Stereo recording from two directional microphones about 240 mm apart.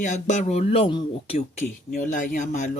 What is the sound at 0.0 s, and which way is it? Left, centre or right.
Speech, left.